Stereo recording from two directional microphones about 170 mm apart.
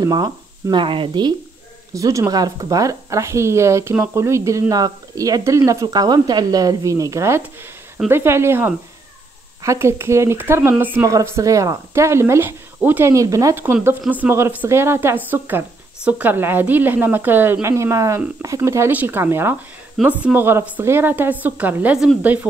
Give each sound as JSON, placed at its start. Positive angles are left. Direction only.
{"t": 0.0, "sound": "a woman's voice", "side_deg": -20}